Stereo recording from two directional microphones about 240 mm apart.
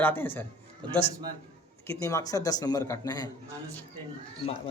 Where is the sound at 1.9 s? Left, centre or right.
Centre.